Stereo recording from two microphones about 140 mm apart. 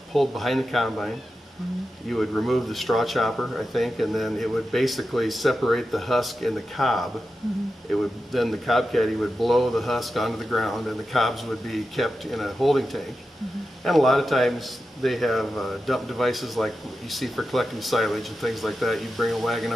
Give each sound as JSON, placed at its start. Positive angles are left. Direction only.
{"t": 0.1, "sound": "speech", "side_deg": 0}